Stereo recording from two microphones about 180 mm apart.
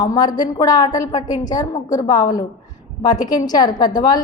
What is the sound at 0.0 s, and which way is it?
A woman's voice, 20° left (ahead or behind).